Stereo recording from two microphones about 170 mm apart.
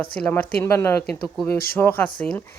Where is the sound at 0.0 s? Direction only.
10° left (ahead or behind).